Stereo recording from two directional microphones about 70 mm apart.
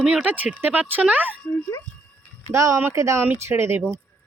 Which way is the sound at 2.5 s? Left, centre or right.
Right.